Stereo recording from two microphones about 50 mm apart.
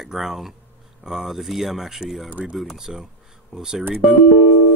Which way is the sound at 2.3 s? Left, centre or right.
Right.